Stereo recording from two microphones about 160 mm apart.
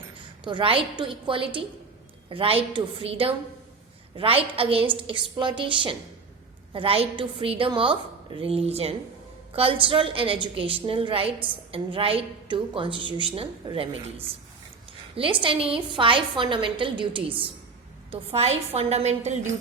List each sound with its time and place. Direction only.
0.4 s a woman's voice: 30° right (ahead or behind)
15.1 s a woman's voice: 35° right (ahead or behind)